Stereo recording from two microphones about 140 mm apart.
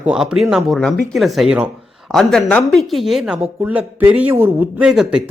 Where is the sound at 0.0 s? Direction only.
5° right (ahead or behind).